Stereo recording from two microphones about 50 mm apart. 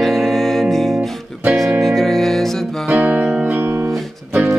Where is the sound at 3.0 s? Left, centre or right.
Right.